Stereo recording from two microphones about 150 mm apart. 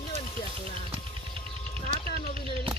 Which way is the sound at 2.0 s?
80° left.